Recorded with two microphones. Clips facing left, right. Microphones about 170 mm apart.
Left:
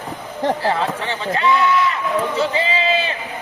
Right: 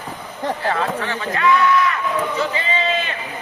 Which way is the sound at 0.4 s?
30° left (ahead or behind).